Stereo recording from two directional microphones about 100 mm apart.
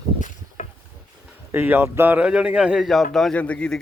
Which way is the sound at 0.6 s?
90° left.